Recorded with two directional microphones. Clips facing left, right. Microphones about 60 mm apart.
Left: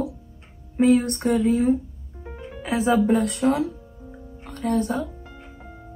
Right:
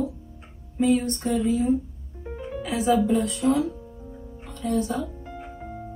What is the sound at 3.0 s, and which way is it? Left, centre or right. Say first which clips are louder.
Speech: left 2 dB; left.